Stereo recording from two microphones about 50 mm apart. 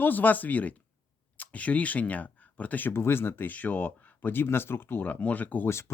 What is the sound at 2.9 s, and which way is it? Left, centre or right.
Speech, left.